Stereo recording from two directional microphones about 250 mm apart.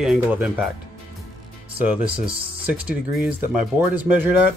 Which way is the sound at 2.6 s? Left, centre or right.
Centre.